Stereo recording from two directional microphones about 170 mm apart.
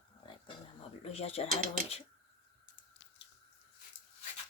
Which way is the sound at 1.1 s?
35° left (ahead or behind).